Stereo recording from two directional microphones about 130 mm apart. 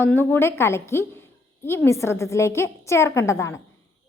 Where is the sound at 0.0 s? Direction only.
15° left (ahead or behind).